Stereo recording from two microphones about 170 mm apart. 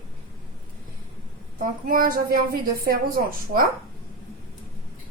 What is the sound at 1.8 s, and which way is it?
A woman's voice, 55° right (ahead or behind).